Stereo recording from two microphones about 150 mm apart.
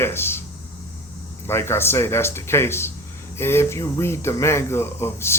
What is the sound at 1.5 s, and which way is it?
Speech, 15° left (ahead or behind).